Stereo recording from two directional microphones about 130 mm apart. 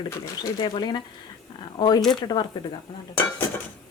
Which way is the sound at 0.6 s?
35° left (ahead or behind).